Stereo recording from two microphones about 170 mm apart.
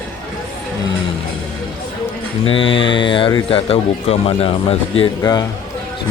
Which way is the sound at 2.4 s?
30° left (ahead or behind).